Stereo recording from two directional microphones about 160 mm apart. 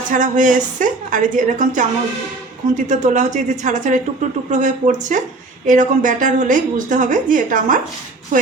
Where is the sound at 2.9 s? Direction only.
50° right (ahead or behind).